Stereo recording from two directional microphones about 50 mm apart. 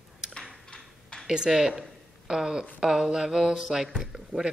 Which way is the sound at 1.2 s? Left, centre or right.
Centre.